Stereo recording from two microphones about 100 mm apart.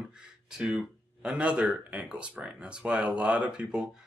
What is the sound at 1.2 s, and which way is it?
Speech, 10° right (ahead or behind).